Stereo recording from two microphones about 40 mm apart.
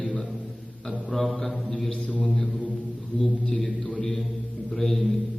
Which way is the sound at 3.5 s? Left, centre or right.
Centre.